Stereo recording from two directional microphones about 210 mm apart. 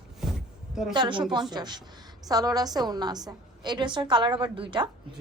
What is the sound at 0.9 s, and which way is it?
A woman's voice, 20° right (ahead or behind).